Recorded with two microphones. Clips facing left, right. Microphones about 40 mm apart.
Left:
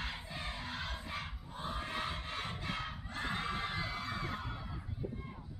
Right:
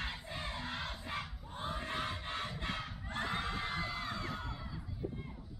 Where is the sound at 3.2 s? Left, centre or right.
Left.